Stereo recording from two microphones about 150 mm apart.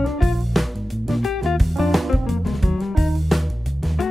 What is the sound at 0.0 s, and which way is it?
Music, centre (ahead or behind).